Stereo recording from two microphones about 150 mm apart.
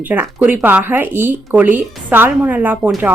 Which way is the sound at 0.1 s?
10° right (ahead or behind).